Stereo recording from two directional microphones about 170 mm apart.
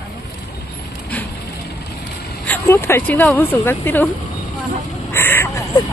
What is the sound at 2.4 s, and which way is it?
Speech, 15° left (ahead or behind).